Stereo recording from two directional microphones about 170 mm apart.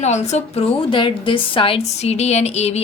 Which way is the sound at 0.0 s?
40° left (ahead or behind).